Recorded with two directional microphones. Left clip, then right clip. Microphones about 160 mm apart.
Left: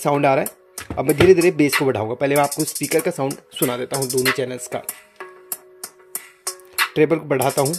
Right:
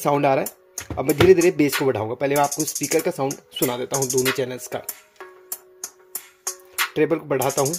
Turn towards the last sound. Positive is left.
turn(degrees=20)  # may be behind; listen again after turning